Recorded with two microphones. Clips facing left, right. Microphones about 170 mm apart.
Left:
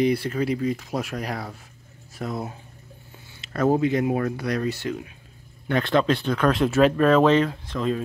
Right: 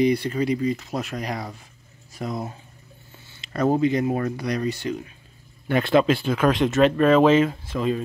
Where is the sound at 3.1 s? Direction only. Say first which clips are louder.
Left 2 dB; 10° left (ahead or behind).